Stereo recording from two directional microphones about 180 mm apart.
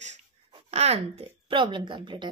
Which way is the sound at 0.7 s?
35° right (ahead or behind).